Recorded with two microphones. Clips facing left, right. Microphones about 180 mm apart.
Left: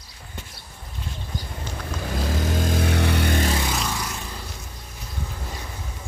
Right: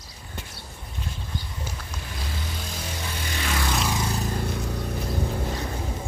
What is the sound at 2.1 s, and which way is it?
Vehicle, 45° left (ahead or behind).